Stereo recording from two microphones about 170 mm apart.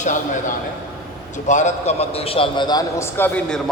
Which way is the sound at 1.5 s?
45° left (ahead or behind).